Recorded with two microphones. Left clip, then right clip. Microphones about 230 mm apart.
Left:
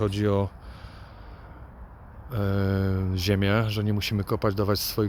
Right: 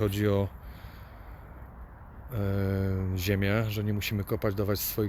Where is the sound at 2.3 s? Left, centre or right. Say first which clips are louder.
Left 4 dB; centre.